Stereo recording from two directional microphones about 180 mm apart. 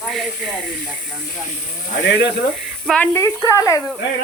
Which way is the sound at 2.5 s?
Centre (ahead or behind).